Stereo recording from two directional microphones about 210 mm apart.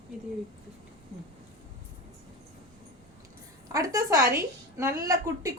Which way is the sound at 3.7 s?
15° right (ahead or behind).